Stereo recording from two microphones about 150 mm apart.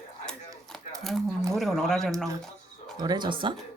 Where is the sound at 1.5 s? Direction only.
Centre (ahead or behind).